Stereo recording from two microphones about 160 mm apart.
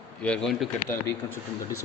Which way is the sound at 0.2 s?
5° left (ahead or behind).